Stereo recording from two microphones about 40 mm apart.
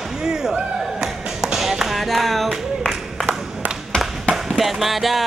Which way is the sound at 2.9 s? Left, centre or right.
Centre.